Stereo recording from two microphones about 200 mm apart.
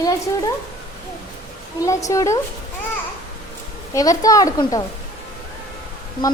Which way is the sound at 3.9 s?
15° left (ahead or behind).